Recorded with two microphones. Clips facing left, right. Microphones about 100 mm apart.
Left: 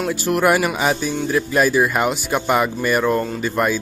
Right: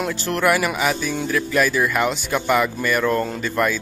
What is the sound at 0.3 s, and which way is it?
Speech, 20° left (ahead or behind).